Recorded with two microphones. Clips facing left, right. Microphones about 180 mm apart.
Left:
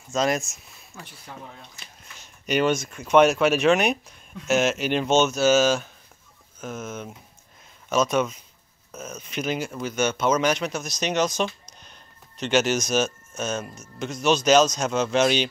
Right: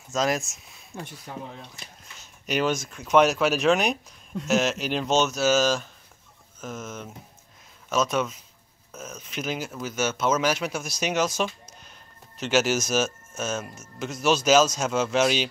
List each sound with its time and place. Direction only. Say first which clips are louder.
0.1 s speech: left 2 dB; centre (ahead or behind)
0.9 s speech: right 6 dB; 30° right (ahead or behind)
2.4 s speech: left 3 dB; centre (ahead or behind)